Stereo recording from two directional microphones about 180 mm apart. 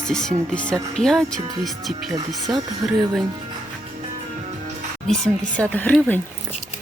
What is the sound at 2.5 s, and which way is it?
Speech, centre (ahead or behind).